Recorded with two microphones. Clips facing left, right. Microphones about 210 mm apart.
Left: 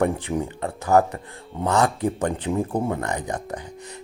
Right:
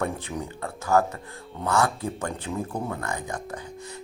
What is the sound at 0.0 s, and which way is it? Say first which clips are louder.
Speech: left 7 dB; 15° left (ahead or behind).